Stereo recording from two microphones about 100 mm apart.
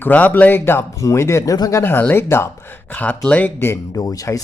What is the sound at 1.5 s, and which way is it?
Speech, 40° left (ahead or behind).